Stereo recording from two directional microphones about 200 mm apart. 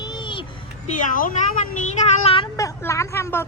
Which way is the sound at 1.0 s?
40° left (ahead or behind).